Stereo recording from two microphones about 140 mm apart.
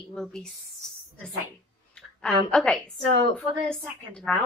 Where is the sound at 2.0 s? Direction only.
5° left (ahead or behind).